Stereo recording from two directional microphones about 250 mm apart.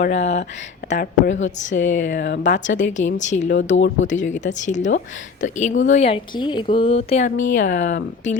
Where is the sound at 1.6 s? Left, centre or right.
Left.